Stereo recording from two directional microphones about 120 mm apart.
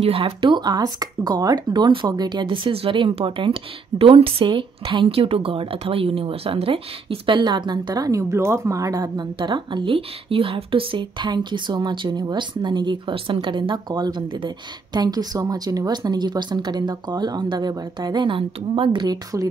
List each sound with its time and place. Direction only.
0.0 s a woman's voice: 50° right (ahead or behind); by 19.5 s 30° right (ahead or behind)